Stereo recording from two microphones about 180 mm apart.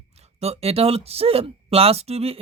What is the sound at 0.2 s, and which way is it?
Speech, 35° right (ahead or behind).